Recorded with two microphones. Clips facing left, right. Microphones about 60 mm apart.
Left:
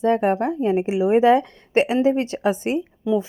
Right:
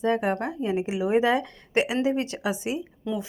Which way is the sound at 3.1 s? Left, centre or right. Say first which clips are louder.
Left 9 dB; centre.